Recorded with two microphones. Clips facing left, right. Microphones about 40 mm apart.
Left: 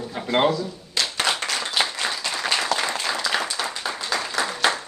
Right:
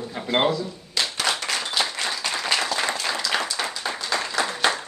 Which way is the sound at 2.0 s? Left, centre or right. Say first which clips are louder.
Left 1 dB; centre.